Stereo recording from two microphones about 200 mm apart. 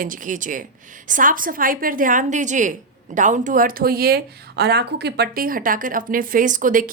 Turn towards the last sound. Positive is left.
turn(degrees=-40)  # may be behind; listen again after turning